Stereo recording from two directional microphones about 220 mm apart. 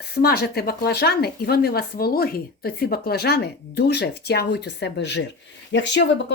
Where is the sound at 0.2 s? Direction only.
45° left (ahead or behind).